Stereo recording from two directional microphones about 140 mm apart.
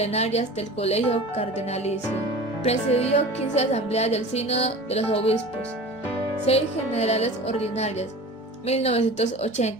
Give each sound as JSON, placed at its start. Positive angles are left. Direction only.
{"t": 0.0, "sound": "speech", "side_deg": 50}
{"t": 6.4, "sound": "speech", "side_deg": 50}